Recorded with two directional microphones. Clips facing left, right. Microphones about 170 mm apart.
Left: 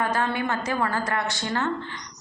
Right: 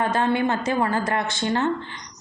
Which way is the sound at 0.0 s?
25° right (ahead or behind).